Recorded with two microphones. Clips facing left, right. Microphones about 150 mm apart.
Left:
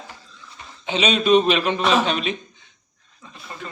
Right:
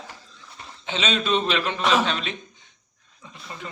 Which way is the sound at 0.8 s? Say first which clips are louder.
Left 6 dB; 15° left (ahead or behind).